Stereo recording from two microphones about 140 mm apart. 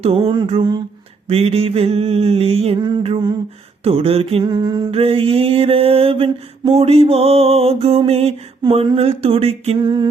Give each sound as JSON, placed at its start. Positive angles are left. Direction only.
{"t": 0.0, "sound": "mantra", "side_deg": -40}
{"t": 4.4, "sound": "mantra", "side_deg": -30}
{"t": 4.9, "sound": "mantra", "side_deg": -40}
{"t": 9.8, "sound": "mantra", "side_deg": -30}